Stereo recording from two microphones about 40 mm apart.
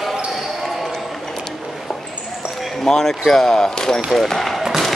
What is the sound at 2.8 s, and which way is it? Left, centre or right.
Speech, centre.